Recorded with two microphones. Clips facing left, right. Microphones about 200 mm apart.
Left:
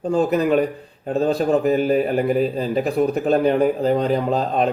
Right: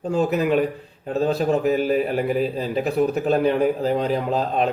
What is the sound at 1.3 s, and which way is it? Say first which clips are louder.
A man's voice: left 2 dB; 5° right (ahead or behind).